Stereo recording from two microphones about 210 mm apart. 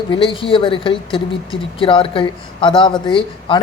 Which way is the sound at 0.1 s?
25° left (ahead or behind).